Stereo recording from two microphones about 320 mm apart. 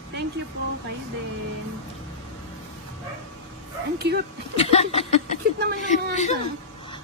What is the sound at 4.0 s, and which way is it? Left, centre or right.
Speech, right.